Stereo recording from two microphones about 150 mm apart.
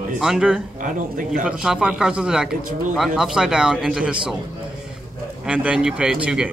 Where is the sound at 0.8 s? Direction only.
65° right (ahead or behind).